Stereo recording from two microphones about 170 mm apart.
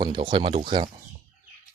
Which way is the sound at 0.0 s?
25° right (ahead or behind).